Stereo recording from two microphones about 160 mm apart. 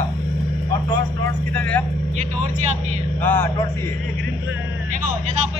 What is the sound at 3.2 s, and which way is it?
Speech, 10° left (ahead or behind).